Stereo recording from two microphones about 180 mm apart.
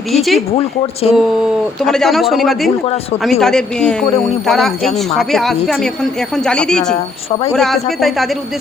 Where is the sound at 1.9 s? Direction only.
Centre (ahead or behind).